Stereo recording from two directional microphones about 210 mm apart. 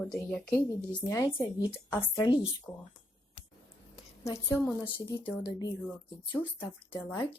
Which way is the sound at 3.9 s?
15° left (ahead or behind).